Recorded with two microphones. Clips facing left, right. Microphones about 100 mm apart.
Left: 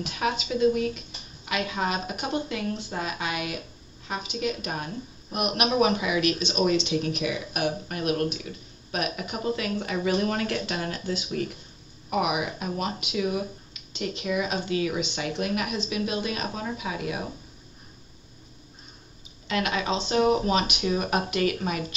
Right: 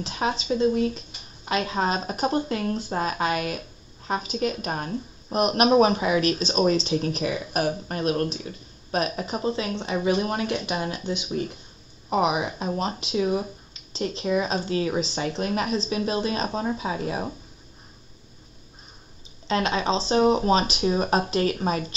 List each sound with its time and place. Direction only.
0.0 s speech: 30° right (ahead or behind)
19.4 s speech: 30° right (ahead or behind)